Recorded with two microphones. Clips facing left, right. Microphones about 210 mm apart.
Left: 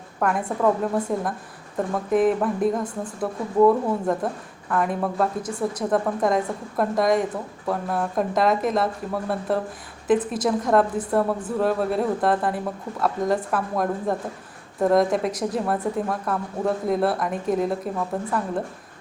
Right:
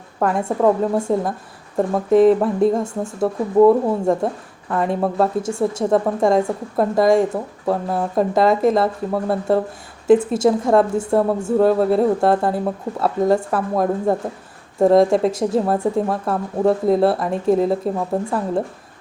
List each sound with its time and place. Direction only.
0.2 s a woman's voice: 30° right (ahead or behind)
10.1 s a woman's voice: 25° right (ahead or behind)